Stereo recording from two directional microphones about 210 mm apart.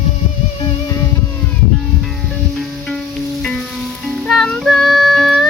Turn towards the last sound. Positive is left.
turn(degrees=0)  # may be behind; listen again after turning